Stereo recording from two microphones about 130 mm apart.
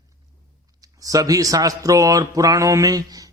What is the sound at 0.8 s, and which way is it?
A man's voice, 30° right (ahead or behind).